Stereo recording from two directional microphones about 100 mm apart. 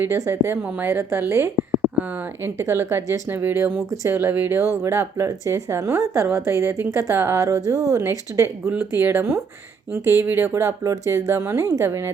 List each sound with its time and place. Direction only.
0.3 s a woman's voice: 25° right (ahead or behind)